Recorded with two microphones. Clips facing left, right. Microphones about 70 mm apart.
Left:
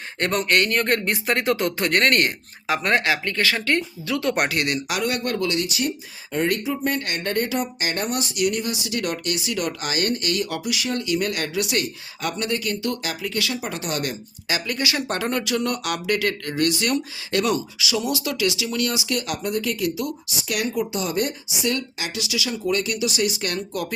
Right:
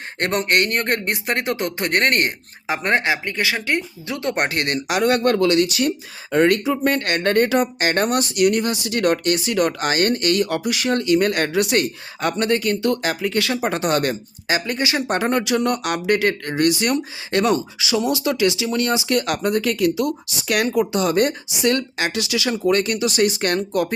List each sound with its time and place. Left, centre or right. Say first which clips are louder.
0.3 s speech: right 1 dB; right
0.8 s speech: even; right
2.0 s speech: right 1 dB; right
5.0 s speech: right 10 dB; right
6.3 s speech: right 6 dB; right
14.4 s speech: right 4 dB; right